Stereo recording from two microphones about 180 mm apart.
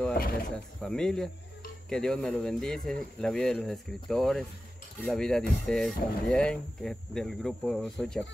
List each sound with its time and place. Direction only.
0.1 s speech: 55° left (ahead or behind)
0.7 s speech: 5° left (ahead or behind)